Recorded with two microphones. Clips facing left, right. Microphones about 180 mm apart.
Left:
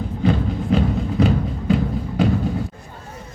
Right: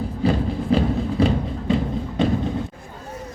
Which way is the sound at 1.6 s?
5° left (ahead or behind).